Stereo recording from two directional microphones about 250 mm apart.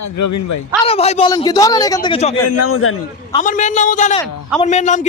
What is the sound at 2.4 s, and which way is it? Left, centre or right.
Speech, left.